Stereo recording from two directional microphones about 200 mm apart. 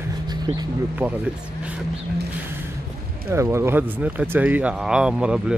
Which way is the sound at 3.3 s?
15° right (ahead or behind).